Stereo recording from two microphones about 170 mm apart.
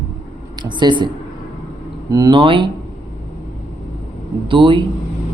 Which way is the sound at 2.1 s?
25° right (ahead or behind).